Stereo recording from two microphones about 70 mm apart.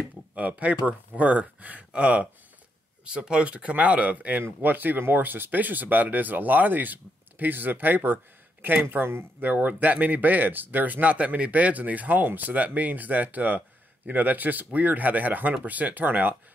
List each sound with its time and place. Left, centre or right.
0.4 s speech: right